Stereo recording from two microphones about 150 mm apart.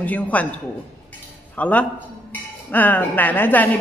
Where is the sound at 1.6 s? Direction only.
10° left (ahead or behind).